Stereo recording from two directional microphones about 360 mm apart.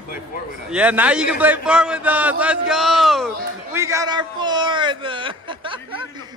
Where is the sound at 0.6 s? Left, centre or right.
Centre.